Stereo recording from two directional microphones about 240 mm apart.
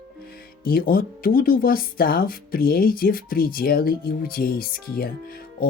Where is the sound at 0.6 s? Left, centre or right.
Left.